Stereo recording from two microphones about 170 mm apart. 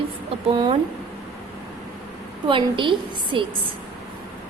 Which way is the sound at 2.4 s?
30° right (ahead or behind).